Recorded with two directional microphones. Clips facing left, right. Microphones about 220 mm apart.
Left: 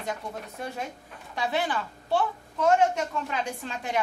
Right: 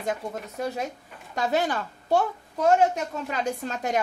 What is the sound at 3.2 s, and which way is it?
Speech, 40° right (ahead or behind).